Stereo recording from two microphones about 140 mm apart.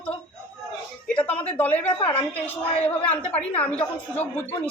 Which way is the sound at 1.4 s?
10° left (ahead or behind).